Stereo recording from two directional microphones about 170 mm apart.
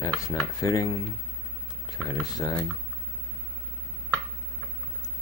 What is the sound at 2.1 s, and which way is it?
Speech, 20° left (ahead or behind).